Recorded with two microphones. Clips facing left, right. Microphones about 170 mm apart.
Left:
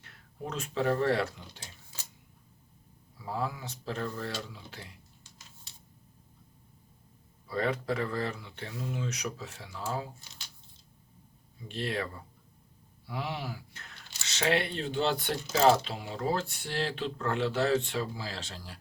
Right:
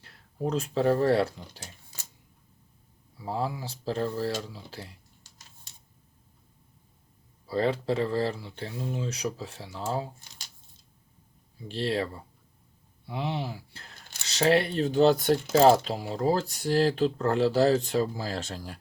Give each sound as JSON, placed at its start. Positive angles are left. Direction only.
{"t": 0.0, "sound": "speech", "side_deg": -35}
{"t": 3.2, "sound": "speech", "side_deg": -30}
{"t": 4.3, "sound": "typing", "side_deg": -35}
{"t": 7.4, "sound": "speech", "side_deg": -30}
{"t": 11.7, "sound": "speech", "side_deg": -30}